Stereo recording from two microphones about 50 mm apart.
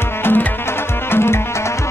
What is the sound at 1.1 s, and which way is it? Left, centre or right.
Music, left.